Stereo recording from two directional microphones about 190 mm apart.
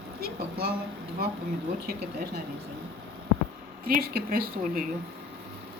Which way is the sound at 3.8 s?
50° right (ahead or behind).